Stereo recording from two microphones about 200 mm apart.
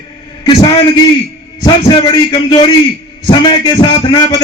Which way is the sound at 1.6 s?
20° left (ahead or behind).